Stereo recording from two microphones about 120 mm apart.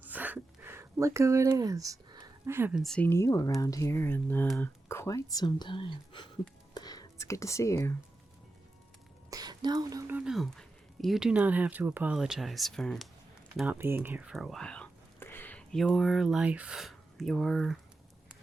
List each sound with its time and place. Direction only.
0.1 s a sound: 15° right (ahead or behind); by 2.2 s 30° right (ahead or behind)
2.5 s speech: 20° right (ahead or behind)
2.7 s speech: centre (ahead or behind)
3.0 s speech: 20° left (ahead or behind); by 6.3 s 45° left (ahead or behind)
6.7 s speech: 35° left (ahead or behind)
9.3 s a sound: 35° right (ahead or behind)
10.1 s speech: 10° right (ahead or behind)
10.3 s speech: 5° left (ahead or behind)
13.7 s speech: 15° right (ahead or behind)
14.3 s speech: centre (ahead or behind)
15.2 s a sound: 15° left (ahead or behind)
15.7 s speech: centre (ahead or behind)